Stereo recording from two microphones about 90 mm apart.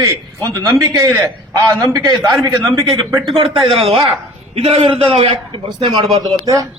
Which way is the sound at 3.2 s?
70° right (ahead or behind).